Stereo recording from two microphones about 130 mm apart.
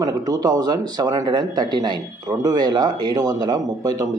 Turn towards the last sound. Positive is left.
turn(degrees=-30)  # may be behind; listen again after turning